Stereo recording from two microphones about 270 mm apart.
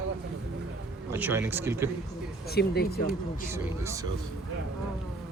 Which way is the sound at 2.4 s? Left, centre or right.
Left.